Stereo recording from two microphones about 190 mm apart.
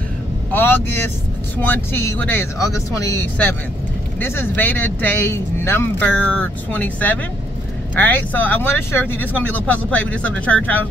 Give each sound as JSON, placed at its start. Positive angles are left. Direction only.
{"t": 0.5, "sound": "speech", "side_deg": 10}